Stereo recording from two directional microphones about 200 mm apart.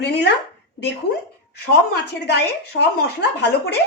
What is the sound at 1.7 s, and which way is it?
A woman's voice, 55° left (ahead or behind).